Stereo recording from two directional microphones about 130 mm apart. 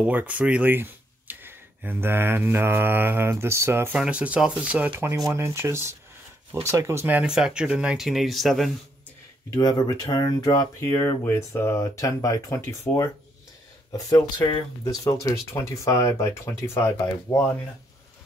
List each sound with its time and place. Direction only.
0.0 s speech: 10° right (ahead or behind)
5.1 s speech: 25° right (ahead or behind); by 8.7 s centre (ahead or behind)
9.5 s speech: 30° left (ahead or behind)
14.1 s speech: 35° left (ahead or behind)
15.0 s speech: 25° left (ahead or behind)